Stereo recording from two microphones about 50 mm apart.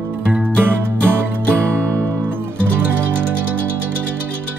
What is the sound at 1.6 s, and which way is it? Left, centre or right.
Music, right.